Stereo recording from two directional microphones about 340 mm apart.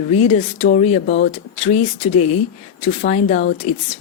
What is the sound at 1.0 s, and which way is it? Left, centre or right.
Speech, left.